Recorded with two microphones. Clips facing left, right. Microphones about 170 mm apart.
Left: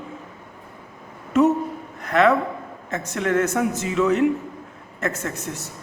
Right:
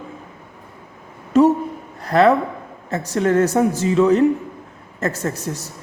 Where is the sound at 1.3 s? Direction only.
35° right (ahead or behind).